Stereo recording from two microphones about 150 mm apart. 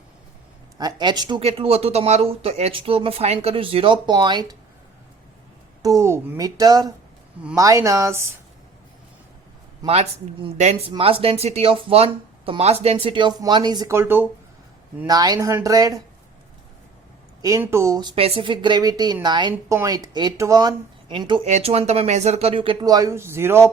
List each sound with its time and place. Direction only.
0.8 s speech: 30° right (ahead or behind)
1.4 s speech: 40° right (ahead or behind)
5.8 s speech: 20° right (ahead or behind)
9.8 s speech: 40° right (ahead or behind)
13.9 s speech: 15° right (ahead or behind)
15.0 s speech: 25° right (ahead or behind)
17.4 s speech: 20° right (ahead or behind)
18.1 s speech: 40° right (ahead or behind)
21.4 s speech: 45° right (ahead or behind); by 23.6 s 15° right (ahead or behind)